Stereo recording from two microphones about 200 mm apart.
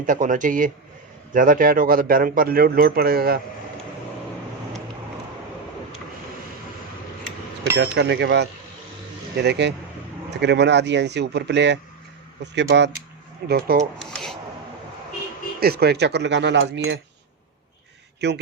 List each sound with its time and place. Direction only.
0.0 s a man's voice: 40° right (ahead or behind)
7.8 s a man's voice: 60° right (ahead or behind)
14.0 s a sound: centre (ahead or behind)
15.6 s speech: 50° right (ahead or behind)